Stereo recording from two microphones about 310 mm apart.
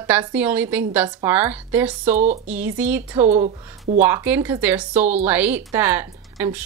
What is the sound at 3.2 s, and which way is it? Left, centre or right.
Speech, right.